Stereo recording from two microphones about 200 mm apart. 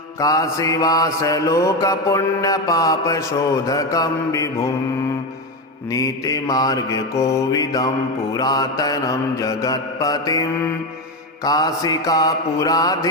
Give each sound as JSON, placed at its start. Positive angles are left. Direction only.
{"t": 0.2, "sound": "mantra", "side_deg": 15}
{"t": 5.9, "sound": "mantra", "side_deg": 15}